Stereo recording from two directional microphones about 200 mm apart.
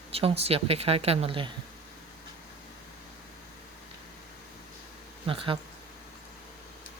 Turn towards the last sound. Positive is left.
turn(degrees=-25)  # may be behind; listen again after turning